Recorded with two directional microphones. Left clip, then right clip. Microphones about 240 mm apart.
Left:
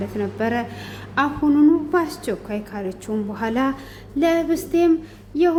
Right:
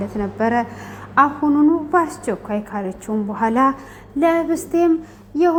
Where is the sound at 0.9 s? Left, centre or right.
Centre.